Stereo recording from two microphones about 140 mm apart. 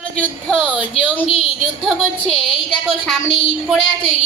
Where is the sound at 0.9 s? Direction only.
40° left (ahead or behind).